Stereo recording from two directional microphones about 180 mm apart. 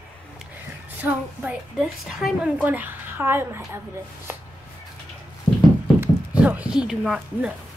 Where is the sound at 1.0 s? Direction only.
10° right (ahead or behind).